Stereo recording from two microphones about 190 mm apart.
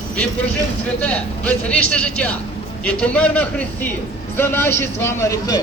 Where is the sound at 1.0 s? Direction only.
5° left (ahead or behind).